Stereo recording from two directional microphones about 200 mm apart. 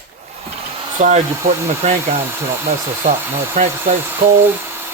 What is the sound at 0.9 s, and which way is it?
Speech, 40° right (ahead or behind).